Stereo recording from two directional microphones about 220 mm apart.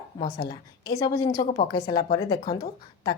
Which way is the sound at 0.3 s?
20° left (ahead or behind).